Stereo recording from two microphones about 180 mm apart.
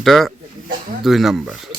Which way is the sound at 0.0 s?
Centre (ahead or behind).